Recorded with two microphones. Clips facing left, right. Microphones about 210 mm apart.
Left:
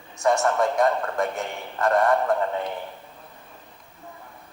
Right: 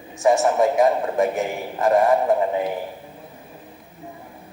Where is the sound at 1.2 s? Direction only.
5° right (ahead or behind).